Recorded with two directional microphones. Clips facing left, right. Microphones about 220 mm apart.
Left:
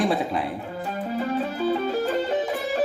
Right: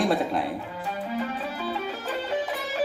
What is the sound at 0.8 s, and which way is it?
Music, 40° left (ahead or behind).